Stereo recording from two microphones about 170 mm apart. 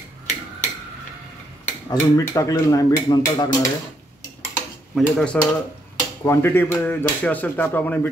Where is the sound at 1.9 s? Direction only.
20° left (ahead or behind).